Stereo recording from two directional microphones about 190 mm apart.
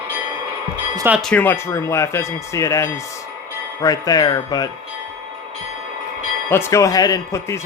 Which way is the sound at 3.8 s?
20° left (ahead or behind).